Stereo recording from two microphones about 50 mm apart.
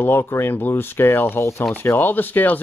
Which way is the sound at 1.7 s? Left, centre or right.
Left.